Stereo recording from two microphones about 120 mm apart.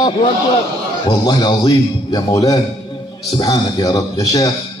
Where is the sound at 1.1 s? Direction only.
35° left (ahead or behind).